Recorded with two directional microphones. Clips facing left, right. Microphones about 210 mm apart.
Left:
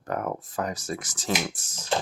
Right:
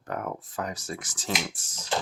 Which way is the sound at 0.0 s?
40° left (ahead or behind).